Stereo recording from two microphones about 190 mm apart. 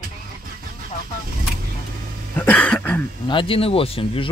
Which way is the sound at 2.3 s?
10° left (ahead or behind).